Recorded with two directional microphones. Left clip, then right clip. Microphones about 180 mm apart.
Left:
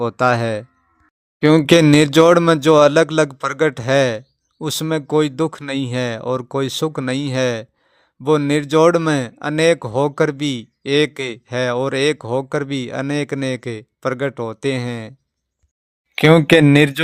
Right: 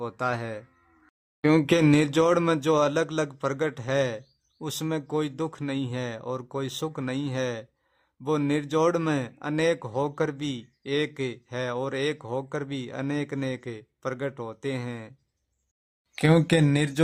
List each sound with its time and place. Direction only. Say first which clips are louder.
0.0 s speech: left 13 dB; 35° left (ahead or behind)
16.1 s speech: left 11 dB; 35° left (ahead or behind)